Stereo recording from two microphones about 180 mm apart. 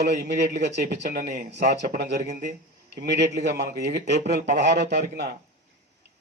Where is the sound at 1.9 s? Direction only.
70° right (ahead or behind).